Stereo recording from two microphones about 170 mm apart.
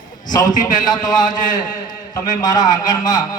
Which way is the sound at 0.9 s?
25° left (ahead or behind).